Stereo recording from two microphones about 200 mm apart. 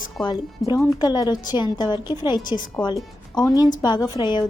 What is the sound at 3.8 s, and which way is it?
Speech, 20° left (ahead or behind).